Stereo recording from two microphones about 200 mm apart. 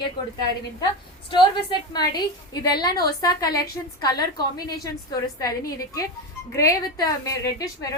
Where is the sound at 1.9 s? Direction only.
20° left (ahead or behind).